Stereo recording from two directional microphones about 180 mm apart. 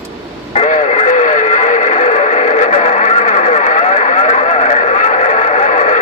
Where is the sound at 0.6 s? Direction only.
40° left (ahead or behind).